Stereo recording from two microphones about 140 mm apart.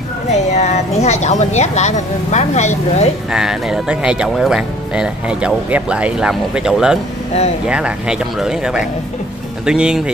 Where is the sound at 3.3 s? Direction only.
5° right (ahead or behind).